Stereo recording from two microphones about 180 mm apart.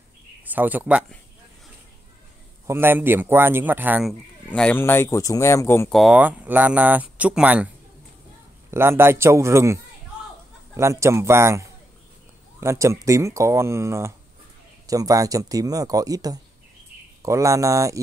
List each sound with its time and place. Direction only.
0.5 s speech: 10° right (ahead or behind)
2.6 s speech: 15° right (ahead or behind)
4.5 s speech: 5° left (ahead or behind)
5.9 s speech: centre (ahead or behind)
10.8 s speech: 15° right (ahead or behind)